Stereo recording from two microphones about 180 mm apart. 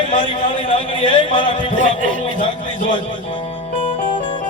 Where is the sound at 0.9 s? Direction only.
25° left (ahead or behind).